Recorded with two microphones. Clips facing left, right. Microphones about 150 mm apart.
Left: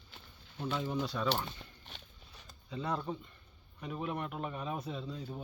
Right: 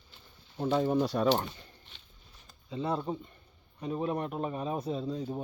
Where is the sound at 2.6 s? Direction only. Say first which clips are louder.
Right 4 dB; 25° right (ahead or behind).